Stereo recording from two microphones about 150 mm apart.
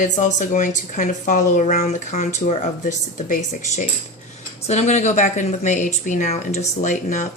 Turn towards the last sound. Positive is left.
turn(degrees=55)  # may be behind; listen again after turning